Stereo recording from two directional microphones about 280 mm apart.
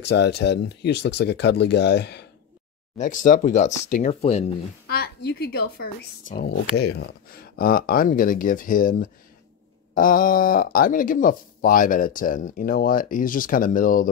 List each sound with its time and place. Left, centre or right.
0.0 s speech: left
3.3 s speech: left
4.8 s speech: left